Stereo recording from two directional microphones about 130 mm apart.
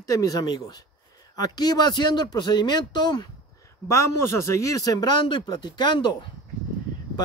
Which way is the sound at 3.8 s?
20° left (ahead or behind).